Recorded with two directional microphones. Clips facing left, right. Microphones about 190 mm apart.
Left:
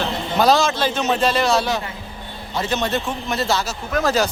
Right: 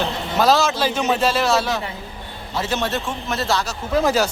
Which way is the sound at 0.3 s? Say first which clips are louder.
Left 1 dB; 5° right (ahead or behind).